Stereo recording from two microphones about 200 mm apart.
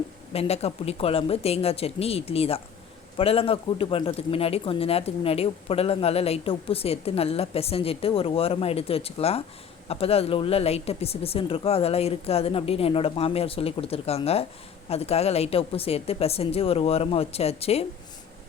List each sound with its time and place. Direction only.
0.3 s speech: 30° left (ahead or behind)